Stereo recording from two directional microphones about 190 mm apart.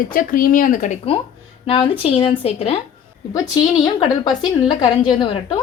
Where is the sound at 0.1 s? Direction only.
45° left (ahead or behind); by 2.8 s 30° left (ahead or behind).